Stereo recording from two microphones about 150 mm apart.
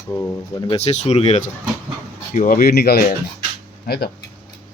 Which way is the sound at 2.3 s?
65° left (ahead or behind).